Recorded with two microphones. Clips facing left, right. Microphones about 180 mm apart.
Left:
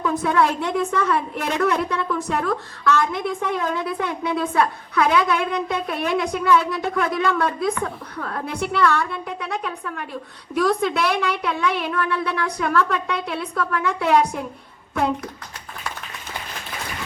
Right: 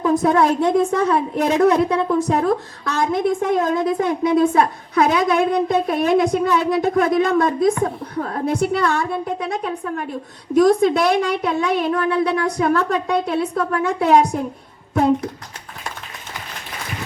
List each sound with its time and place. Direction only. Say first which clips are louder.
0.0 s a woman's voice: right 4 dB; 40° right (ahead or behind)